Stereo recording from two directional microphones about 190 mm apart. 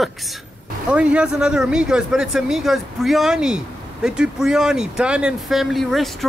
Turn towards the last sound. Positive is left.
turn(degrees=0)  # may be behind; listen again after turning